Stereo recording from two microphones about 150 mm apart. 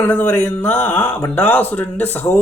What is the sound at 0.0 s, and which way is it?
Speech, 10° left (ahead or behind).